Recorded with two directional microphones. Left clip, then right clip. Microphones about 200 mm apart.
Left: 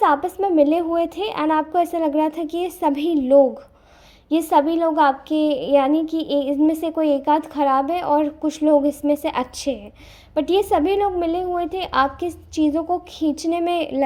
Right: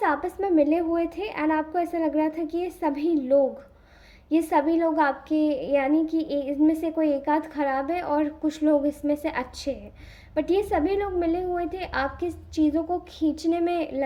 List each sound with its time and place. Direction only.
0.0 s a woman's voice: 30° left (ahead or behind)